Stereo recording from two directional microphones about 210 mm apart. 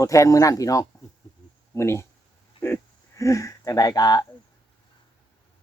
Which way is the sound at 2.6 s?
15° left (ahead or behind).